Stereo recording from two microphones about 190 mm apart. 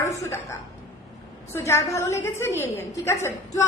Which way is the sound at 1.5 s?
15° left (ahead or behind).